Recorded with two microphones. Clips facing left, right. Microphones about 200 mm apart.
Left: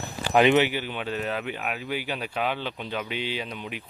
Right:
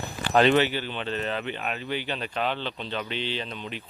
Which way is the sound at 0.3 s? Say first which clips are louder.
Left 1 dB; 15° left (ahead or behind).